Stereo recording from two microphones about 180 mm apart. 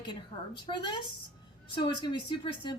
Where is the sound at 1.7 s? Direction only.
25° left (ahead or behind).